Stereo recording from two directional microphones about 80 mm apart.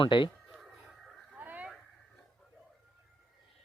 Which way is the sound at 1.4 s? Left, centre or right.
Right.